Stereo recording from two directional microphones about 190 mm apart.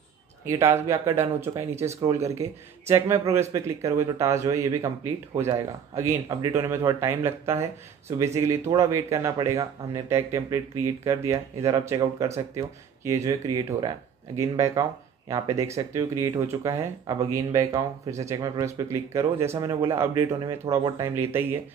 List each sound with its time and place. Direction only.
0.5 s speech: 15° right (ahead or behind)